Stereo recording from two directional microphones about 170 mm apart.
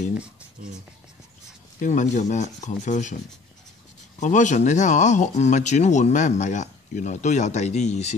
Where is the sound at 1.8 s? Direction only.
45° left (ahead or behind).